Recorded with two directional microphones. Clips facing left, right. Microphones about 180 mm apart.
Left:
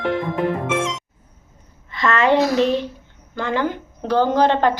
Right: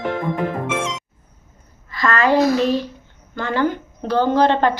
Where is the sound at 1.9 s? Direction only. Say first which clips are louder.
Even; 25° left (ahead or behind).